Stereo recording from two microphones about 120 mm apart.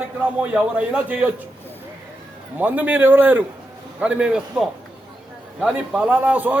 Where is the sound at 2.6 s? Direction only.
15° right (ahead or behind).